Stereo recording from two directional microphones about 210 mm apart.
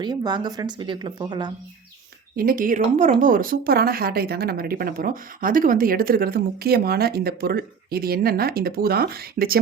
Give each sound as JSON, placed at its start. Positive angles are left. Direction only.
{"t": 0.0, "sound": "speech", "side_deg": -20}
{"t": 2.3, "sound": "speech", "side_deg": -45}